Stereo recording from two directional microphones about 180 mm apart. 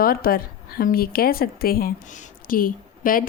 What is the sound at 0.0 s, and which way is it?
A woman's voice, 55° left (ahead or behind).